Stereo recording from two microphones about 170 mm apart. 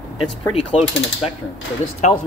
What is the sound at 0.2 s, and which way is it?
Speech, 35° left (ahead or behind).